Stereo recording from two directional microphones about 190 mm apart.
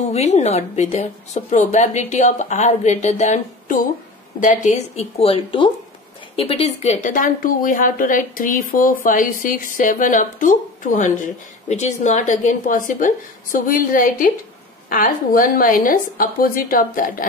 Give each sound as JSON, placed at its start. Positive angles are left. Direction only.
{"t": 0.1, "sound": "a woman's voice", "side_deg": 35}